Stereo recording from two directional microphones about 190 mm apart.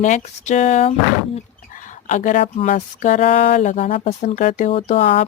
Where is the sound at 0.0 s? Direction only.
40° left (ahead or behind).